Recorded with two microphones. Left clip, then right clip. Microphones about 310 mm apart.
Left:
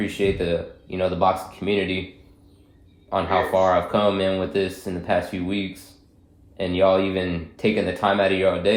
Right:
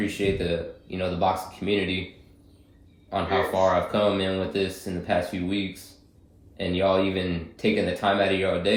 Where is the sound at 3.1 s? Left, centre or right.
Left.